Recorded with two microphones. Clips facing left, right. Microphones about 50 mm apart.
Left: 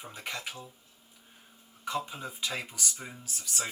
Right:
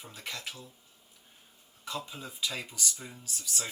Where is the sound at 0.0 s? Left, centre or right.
Left.